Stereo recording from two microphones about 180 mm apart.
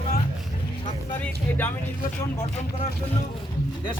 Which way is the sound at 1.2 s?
10° left (ahead or behind).